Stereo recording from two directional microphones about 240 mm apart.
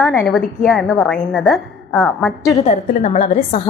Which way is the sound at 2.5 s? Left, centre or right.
Left.